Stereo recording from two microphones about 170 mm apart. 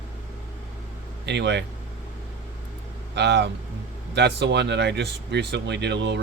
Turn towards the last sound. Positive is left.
turn(degrees=-90)